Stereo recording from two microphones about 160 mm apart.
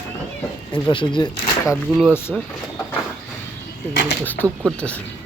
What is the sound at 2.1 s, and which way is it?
Speech, 15° left (ahead or behind).